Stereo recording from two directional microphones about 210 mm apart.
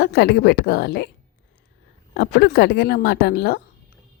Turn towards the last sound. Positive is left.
turn(degrees=50)  # may be behind; listen again after turning